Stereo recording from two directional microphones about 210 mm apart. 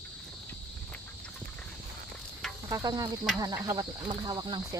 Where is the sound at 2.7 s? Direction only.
15° right (ahead or behind).